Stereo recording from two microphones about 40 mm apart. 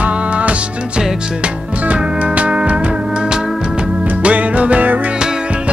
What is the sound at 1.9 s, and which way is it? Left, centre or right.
Music, right.